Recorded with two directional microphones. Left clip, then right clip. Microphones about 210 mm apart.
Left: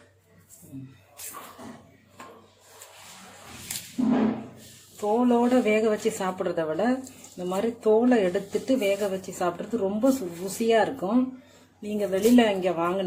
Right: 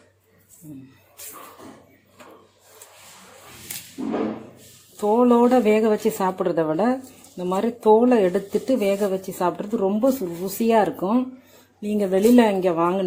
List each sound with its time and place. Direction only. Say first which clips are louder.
4.9 s speech: right 6 dB; 35° right (ahead or behind)